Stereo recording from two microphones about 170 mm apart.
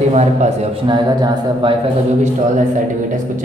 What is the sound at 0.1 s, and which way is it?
Speech, 40° right (ahead or behind).